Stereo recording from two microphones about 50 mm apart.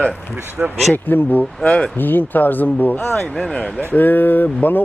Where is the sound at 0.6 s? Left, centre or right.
Right.